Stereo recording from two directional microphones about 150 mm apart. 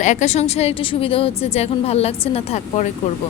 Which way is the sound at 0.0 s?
50° left (ahead or behind).